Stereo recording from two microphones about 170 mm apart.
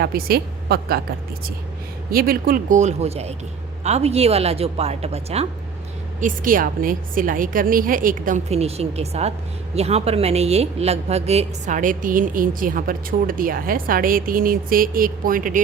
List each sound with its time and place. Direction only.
0.0 s a woman's voice: 65° right (ahead or behind)
2.0 s a woman's voice: 60° right (ahead or behind); by 5.5 s 35° right (ahead or behind)
6.1 s a woman's voice: 50° right (ahead or behind)